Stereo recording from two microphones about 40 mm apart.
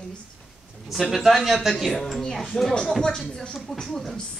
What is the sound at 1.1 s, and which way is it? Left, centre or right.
Speech, centre.